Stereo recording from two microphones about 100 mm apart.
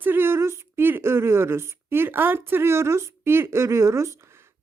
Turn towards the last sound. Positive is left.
turn(degrees=-30)  # may be behind; listen again after turning